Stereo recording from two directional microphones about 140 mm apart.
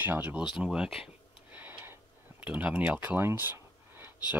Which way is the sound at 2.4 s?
10° right (ahead or behind).